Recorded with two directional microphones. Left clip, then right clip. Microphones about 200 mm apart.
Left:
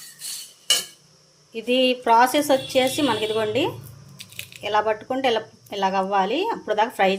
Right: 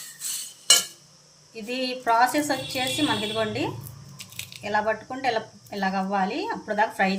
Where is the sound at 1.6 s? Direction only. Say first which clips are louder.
Left 7 dB; 40° left (ahead or behind).